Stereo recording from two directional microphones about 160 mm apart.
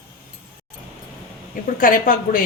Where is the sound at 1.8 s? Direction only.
60° left (ahead or behind).